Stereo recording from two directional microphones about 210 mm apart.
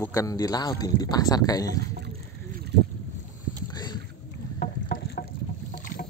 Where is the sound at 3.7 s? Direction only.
20° left (ahead or behind).